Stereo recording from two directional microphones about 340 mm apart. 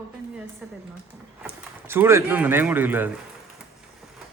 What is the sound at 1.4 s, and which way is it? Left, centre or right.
Speech, centre.